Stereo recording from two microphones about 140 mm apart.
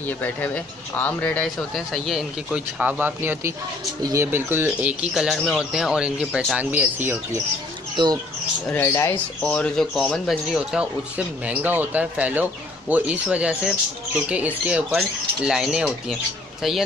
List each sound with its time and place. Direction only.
0.0 s speech: 10° left (ahead or behind); by 7.4 s 15° right (ahead or behind)
7.9 s speech: 35° right (ahead or behind)
8.6 s speech: 15° left (ahead or behind); by 16.2 s 5° right (ahead or behind)